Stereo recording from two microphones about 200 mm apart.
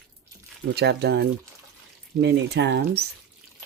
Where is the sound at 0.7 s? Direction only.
55° right (ahead or behind).